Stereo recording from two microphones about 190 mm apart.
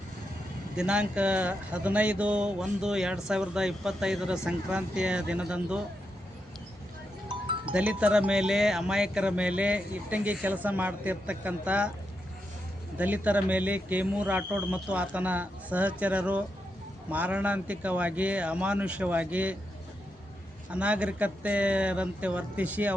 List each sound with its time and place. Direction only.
0.8 s speech: 5° right (ahead or behind)
7.3 s music: 25° right (ahead or behind)
7.7 s speech: 5° right (ahead or behind)
13.0 s speech: 10° right (ahead or behind)
20.7 s speech: 5° right (ahead or behind)